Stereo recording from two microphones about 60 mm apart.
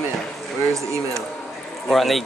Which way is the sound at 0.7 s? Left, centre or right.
Right.